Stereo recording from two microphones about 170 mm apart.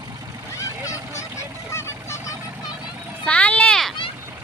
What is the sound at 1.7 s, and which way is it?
Vehicle, 15° left (ahead or behind).